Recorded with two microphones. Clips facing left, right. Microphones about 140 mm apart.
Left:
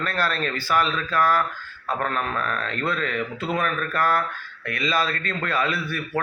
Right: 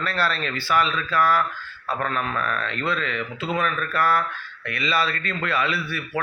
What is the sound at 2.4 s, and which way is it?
A man's voice, 35° left (ahead or behind).